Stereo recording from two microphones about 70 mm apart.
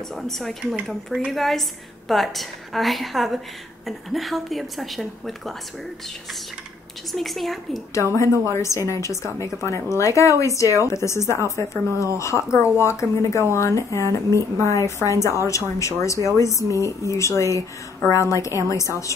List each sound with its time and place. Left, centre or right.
0.1 s a woman's voice: centre
7.1 s a woman's voice: centre
7.9 s speech: left